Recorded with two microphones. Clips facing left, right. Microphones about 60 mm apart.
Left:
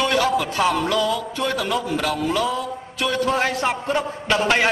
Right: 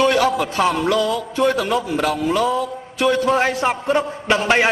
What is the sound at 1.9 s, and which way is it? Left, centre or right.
A man's voice, centre.